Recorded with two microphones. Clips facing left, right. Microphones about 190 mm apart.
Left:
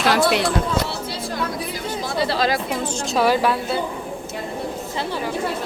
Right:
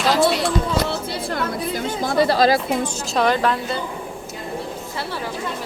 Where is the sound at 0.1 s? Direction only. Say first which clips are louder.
Right 1 dB; 65° left (ahead or behind).